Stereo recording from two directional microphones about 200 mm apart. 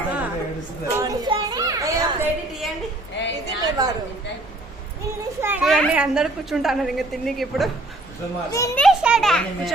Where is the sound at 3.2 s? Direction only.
60° left (ahead or behind).